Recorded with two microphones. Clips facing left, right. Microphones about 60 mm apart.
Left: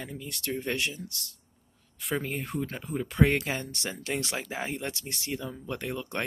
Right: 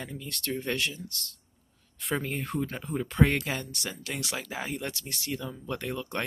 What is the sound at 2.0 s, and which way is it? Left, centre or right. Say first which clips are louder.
Speech: even; centre.